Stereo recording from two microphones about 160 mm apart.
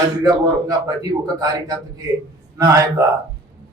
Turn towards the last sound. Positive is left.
turn(degrees=-20)  # may be behind; listen again after turning